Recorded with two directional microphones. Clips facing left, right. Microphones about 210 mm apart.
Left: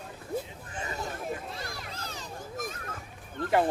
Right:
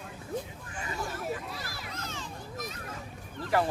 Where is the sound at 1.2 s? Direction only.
5° right (ahead or behind).